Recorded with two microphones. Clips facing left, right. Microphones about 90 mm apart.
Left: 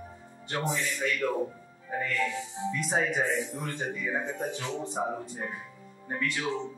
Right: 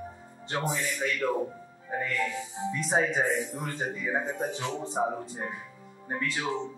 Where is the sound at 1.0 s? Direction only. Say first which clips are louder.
Right 1 dB; 20° right (ahead or behind).